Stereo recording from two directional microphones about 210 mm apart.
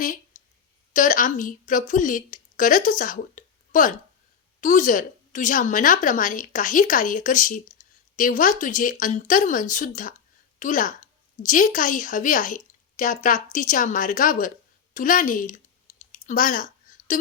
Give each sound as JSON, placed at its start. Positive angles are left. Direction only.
{"t": 0.0, "sound": "a sound", "side_deg": 40}
{"t": 0.9, "sound": "a woman's voice", "side_deg": 40}
{"t": 14.9, "sound": "clicking", "side_deg": 40}